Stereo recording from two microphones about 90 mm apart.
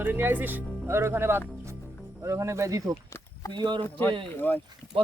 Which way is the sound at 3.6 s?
60° right (ahead or behind).